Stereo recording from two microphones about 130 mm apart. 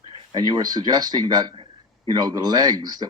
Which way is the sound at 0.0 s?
40° right (ahead or behind).